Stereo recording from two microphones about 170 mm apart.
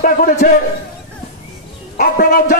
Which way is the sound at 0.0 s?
55° left (ahead or behind).